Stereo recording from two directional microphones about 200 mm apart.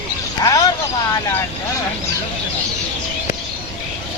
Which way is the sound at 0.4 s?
20° left (ahead or behind).